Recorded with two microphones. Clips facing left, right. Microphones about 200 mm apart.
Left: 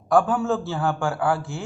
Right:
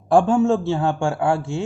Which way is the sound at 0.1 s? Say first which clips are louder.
Right 4 dB; 30° right (ahead or behind).